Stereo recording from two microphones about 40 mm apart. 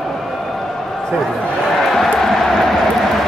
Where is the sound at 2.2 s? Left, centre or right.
Centre.